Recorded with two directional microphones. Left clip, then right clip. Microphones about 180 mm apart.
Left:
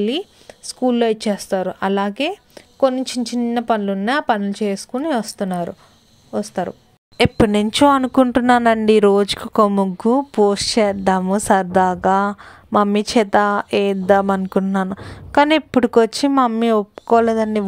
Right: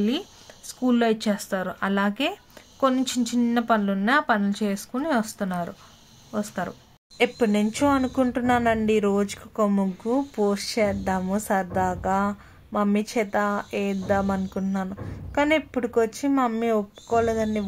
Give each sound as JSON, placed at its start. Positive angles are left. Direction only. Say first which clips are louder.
{"t": 0.7, "sound": "speech", "louder": "left 6 dB", "side_deg": 25}
{"t": 7.2, "sound": "speech", "louder": "left 7 dB", "side_deg": 55}